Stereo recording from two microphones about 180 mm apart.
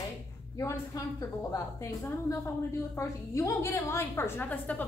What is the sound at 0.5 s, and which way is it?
A woman's voice, 15° left (ahead or behind).